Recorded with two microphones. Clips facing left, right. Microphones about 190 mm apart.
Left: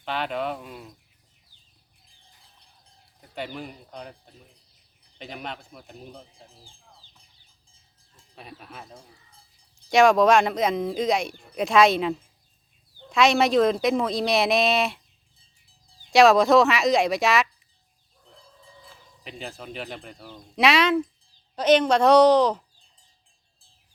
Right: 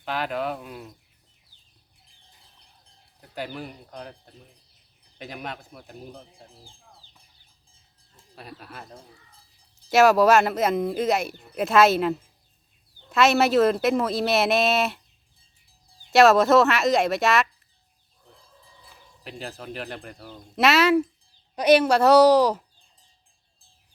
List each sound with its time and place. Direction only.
0.0 s speech: 5° right (ahead or behind)
3.2 s speech: 5° right (ahead or behind)
8.4 s speech: centre (ahead or behind)
16.1 s speech: centre (ahead or behind)
19.2 s a woman's voice: centre (ahead or behind)